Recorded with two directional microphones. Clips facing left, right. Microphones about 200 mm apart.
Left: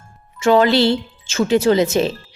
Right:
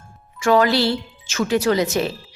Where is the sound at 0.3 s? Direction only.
25° left (ahead or behind).